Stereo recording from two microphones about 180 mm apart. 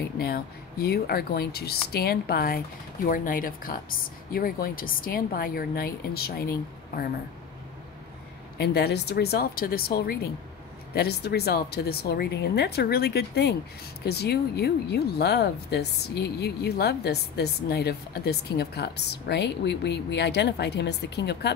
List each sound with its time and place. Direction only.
0.2 s speech: 60° left (ahead or behind)
8.5 s speech: 65° left (ahead or behind)